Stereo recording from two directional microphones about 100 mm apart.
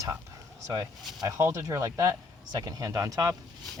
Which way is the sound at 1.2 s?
30° right (ahead or behind).